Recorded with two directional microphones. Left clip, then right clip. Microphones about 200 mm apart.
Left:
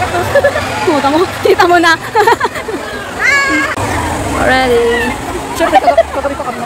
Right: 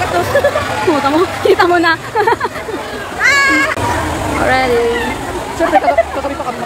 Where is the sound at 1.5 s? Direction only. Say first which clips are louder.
Left 3 dB; 10° left (ahead or behind).